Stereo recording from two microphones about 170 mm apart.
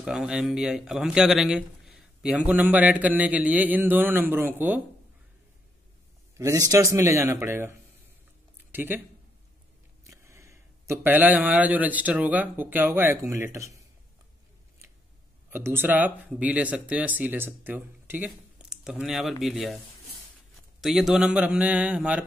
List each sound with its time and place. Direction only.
0.0 s speech: 5° right (ahead or behind)
6.3 s speech: 20° right (ahead or behind)
8.7 s speech: 10° right (ahead or behind)
10.0 s speech: 15° right (ahead or behind)
15.5 s speech: 15° right (ahead or behind)
20.8 s speech: centre (ahead or behind)